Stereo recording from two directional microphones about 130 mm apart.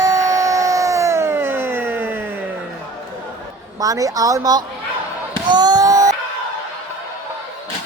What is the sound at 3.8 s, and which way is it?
Speech, 25° right (ahead or behind).